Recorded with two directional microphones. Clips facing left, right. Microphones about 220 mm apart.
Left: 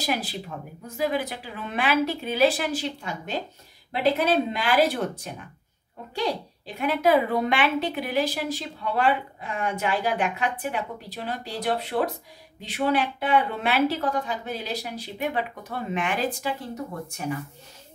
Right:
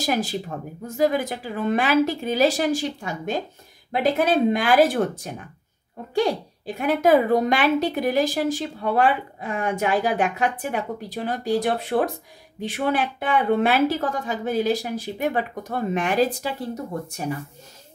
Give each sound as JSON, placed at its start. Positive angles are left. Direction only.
{"t": 0.0, "sound": "a woman's voice", "side_deg": -45}